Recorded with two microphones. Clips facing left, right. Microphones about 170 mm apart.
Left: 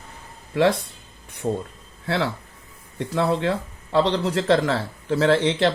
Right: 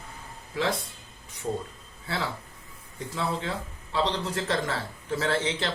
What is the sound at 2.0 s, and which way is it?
Speech, 70° left (ahead or behind).